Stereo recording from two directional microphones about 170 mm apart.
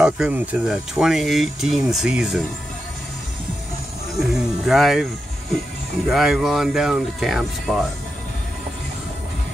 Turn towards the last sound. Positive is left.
turn(degrees=0)  # may be behind; listen again after turning